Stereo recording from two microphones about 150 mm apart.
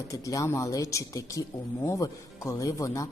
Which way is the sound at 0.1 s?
20° left (ahead or behind).